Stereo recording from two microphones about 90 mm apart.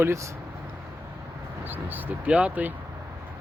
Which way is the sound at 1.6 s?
20° right (ahead or behind).